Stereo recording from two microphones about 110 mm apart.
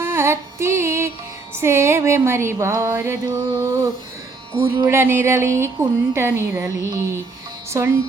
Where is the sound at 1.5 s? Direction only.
20° right (ahead or behind).